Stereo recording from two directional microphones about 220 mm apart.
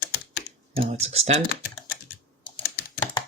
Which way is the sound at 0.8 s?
30° right (ahead or behind).